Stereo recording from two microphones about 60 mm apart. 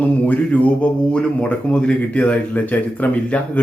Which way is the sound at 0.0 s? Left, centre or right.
Left.